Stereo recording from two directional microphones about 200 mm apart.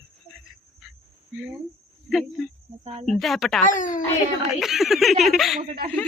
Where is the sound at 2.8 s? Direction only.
30° right (ahead or behind).